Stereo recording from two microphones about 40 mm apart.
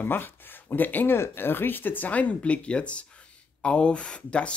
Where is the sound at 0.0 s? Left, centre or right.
Left.